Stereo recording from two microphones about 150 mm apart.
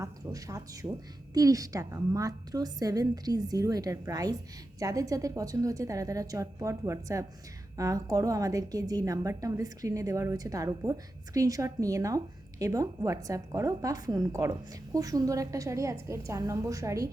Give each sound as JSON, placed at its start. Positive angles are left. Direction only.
{"t": 0.0, "sound": "a woman's voice", "side_deg": -20}